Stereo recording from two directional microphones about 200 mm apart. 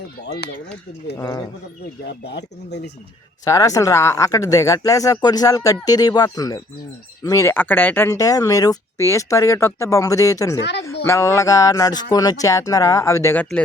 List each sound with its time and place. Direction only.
0.3 s speech: 55° left (ahead or behind)
1.1 s speech: 20° left (ahead or behind)
2.0 s speech: 60° left (ahead or behind)
3.4 s speech: 15° left (ahead or behind)
10.6 s speech: 60° left (ahead or behind)
11.0 s speech: 15° left (ahead or behind)